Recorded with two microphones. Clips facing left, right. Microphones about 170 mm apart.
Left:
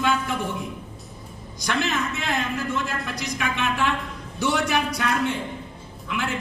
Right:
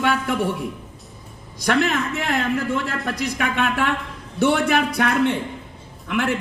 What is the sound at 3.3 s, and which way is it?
A man's voice, 55° right (ahead or behind).